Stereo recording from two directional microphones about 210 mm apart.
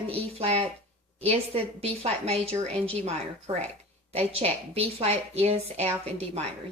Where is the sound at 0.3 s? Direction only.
30° right (ahead or behind).